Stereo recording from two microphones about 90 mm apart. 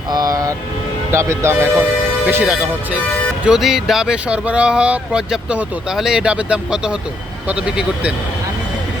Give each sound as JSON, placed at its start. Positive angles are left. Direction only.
{"t": 0.1, "sound": "speech", "side_deg": -45}
{"t": 2.2, "sound": "speech", "side_deg": -15}